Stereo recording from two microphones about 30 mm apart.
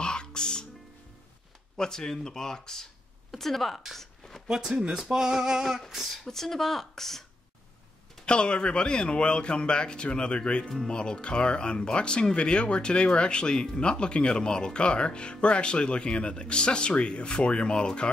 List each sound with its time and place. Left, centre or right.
0.0 s music: left
1.8 s speech: centre
3.3 s speech: centre
3.9 s a sound: centre
4.5 s a sound: right
6.3 s speech: centre
8.3 s speech: left